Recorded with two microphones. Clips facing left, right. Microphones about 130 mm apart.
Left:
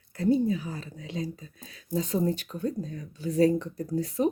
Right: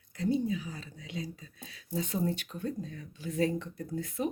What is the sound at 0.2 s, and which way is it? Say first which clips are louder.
Speech: left 6 dB; 50° left (ahead or behind).